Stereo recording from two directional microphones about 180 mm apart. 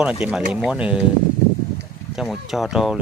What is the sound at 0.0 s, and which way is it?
Speech, 5° right (ahead or behind).